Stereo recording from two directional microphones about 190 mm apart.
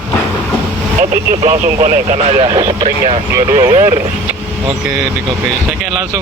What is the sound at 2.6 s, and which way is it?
Speech, 20° right (ahead or behind).